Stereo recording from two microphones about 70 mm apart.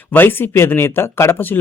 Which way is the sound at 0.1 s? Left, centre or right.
Left.